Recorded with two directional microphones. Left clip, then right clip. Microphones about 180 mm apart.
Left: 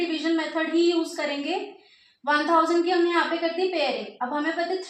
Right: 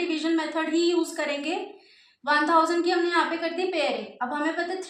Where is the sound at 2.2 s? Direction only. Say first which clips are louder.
Even; 20° right (ahead or behind).